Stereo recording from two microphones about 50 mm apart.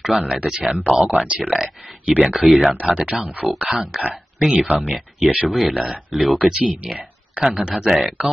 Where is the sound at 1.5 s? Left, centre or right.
Centre.